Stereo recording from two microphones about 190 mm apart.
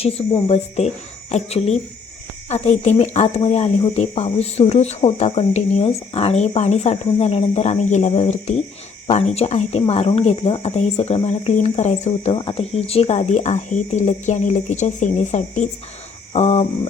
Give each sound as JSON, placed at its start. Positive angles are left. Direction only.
{"t": 0.0, "sound": "speech", "side_deg": 30}